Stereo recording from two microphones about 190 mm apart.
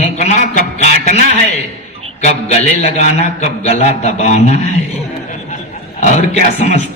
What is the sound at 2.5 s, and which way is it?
A man's voice, 35° left (ahead or behind).